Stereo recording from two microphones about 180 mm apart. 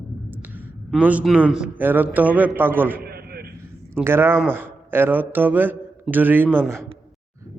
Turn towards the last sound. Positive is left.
turn(degrees=-15)  # may be behind; listen again after turning